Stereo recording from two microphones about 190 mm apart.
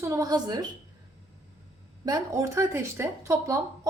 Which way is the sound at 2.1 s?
20° right (ahead or behind).